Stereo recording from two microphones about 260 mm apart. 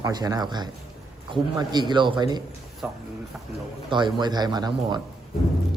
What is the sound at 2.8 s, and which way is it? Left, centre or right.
Speech, centre.